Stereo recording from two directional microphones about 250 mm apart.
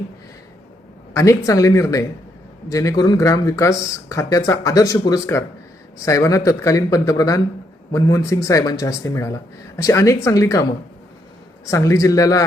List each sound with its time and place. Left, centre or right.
1.1 s speech: centre